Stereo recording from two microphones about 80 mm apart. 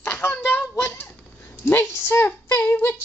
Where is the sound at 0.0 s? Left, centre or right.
Left.